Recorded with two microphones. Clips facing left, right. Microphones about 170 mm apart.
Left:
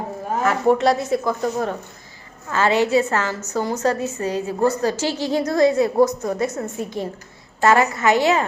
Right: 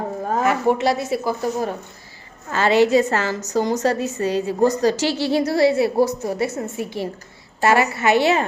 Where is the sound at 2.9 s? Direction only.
35° right (ahead or behind).